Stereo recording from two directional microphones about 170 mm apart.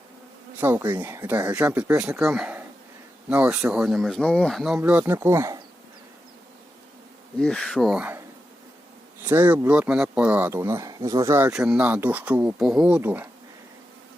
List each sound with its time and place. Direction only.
0.6 s speech: 10° right (ahead or behind)
4.8 s speech: 10° right (ahead or behind)
7.3 s speech: 5° left (ahead or behind)
9.2 s speech: 10° right (ahead or behind)
11.5 s speech: 5° right (ahead or behind)